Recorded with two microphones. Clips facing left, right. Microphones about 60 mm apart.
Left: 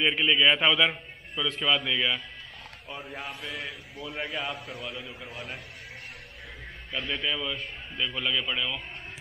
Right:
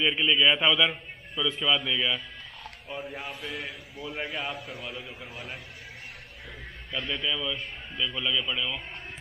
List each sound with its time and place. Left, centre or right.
0.0 s a man's voice: centre
6.9 s a man's voice: centre